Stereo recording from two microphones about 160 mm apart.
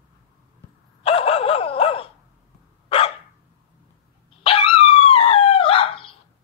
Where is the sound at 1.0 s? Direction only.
35° left (ahead or behind).